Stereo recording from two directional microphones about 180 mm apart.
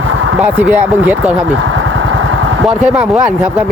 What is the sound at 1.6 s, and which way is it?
Vehicle, 90° right.